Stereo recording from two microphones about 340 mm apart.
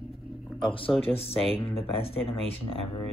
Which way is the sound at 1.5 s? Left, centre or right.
Centre.